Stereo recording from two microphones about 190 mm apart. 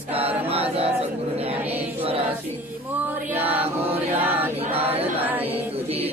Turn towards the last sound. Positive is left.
turn(degrees=-10)  # may be behind; listen again after turning